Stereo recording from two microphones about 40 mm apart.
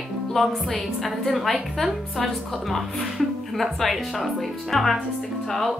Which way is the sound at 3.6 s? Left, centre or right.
Centre.